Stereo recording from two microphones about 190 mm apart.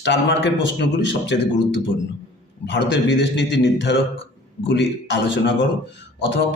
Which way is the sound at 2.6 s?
70° left (ahead or behind).